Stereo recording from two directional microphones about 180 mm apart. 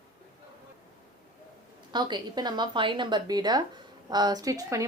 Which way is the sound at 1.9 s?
25° right (ahead or behind).